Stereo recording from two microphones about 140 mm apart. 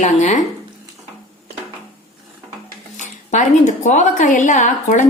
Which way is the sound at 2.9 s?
60° left (ahead or behind).